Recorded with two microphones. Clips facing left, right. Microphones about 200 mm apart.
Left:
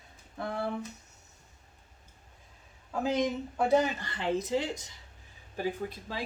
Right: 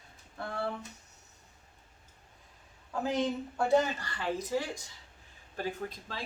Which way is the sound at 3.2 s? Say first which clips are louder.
Left 2 dB; 15° left (ahead or behind).